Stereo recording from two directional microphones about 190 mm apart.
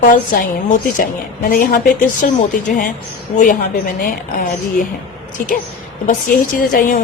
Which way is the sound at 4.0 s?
50° left (ahead or behind).